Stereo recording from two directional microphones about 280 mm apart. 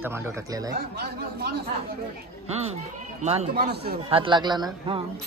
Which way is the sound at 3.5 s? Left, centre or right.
Right.